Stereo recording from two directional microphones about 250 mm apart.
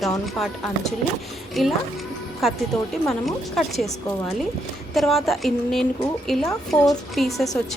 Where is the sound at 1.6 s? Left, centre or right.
Centre.